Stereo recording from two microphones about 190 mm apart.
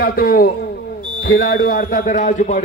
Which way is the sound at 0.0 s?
50° left (ahead or behind).